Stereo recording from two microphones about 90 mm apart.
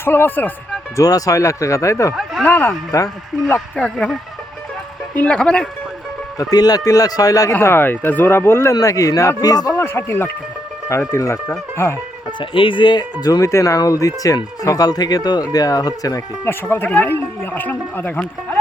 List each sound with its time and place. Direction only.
0.0 s speech: 25° left (ahead or behind)
0.9 s speech: 40° left (ahead or behind)
2.4 s speech: 20° left (ahead or behind)
2.9 s speech: 35° left (ahead or behind)
3.8 s speech: 5° left (ahead or behind)
6.4 s speech: 45° left (ahead or behind)
7.5 s speech: 25° left (ahead or behind)
8.7 s speech: 40° left (ahead or behind)
9.7 s speech: 25° left (ahead or behind)
12.4 s speech: 70° left (ahead or behind); by 13.5 s 45° left (ahead or behind)
13.5 s speech: 35° left (ahead or behind)
16.5 s speech: 25° left (ahead or behind)